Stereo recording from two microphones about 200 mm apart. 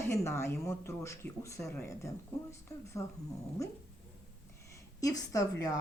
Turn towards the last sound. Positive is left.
turn(degrees=15)  # may be behind; listen again after turning